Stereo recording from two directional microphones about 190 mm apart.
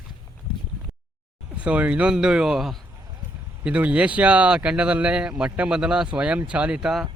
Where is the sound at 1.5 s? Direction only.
5° right (ahead or behind).